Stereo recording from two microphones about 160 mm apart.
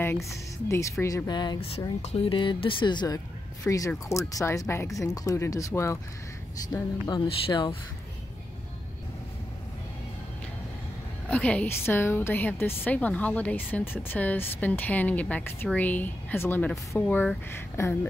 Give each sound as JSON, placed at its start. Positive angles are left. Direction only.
{"t": 0.0, "sound": "speech", "side_deg": 15}
{"t": 2.0, "sound": "speech", "side_deg": 35}
{"t": 7.1, "sound": "speech", "side_deg": 25}
{"t": 11.2, "sound": "a woman's voice", "side_deg": 10}